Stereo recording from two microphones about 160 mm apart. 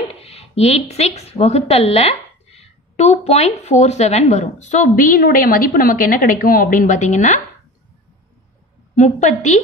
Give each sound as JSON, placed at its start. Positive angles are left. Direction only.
{"t": 0.1, "sound": "speech", "side_deg": 40}
{"t": 8.9, "sound": "speech", "side_deg": 50}